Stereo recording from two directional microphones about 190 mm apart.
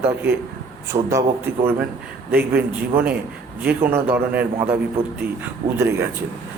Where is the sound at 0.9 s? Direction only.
30° right (ahead or behind).